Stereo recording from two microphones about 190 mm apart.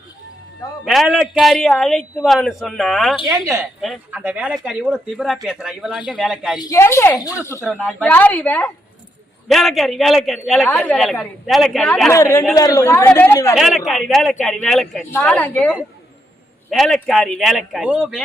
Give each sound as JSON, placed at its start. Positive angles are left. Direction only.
{"t": 0.9, "sound": "speech", "side_deg": 0}
{"t": 6.6, "sound": "a woman's voice", "side_deg": 15}
{"t": 13.6, "sound": "a woman's voice", "side_deg": 0}